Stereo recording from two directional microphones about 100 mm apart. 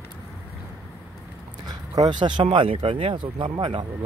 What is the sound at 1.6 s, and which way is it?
Speech, 45° right (ahead or behind).